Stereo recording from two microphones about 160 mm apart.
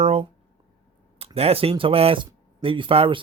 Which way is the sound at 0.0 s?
40° right (ahead or behind).